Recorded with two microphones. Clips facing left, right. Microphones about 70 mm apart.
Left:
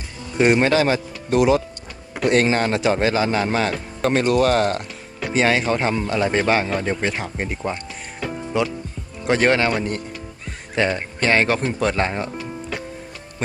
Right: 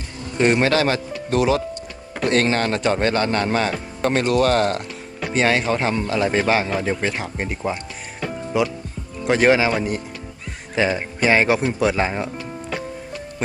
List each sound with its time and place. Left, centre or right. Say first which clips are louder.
0.3 s a man's voice: left 1 dB; centre